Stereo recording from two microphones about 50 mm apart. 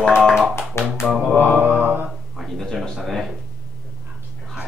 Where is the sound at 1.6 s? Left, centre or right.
Right.